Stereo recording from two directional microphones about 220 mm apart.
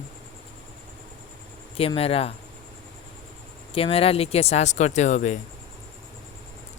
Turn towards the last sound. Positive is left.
turn(degrees=30)  # may be behind; listen again after turning